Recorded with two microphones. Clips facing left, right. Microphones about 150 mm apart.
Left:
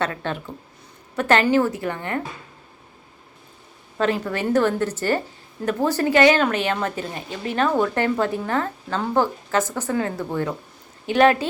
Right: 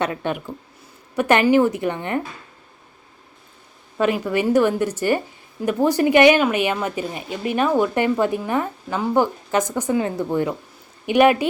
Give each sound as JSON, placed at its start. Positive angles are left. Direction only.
{"t": 0.0, "sound": "a woman's voice", "side_deg": -15}
{"t": 3.9, "sound": "a woman's voice", "side_deg": -10}